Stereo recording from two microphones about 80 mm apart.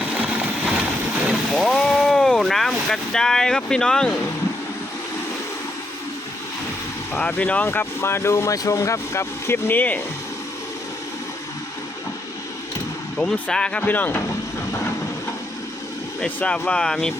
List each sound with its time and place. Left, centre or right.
0.1 s a sound: centre
1.3 s vehicle: centre
7.1 s speech: centre
13.1 s speech: centre
13.8 s speech: left
16.2 s speech: centre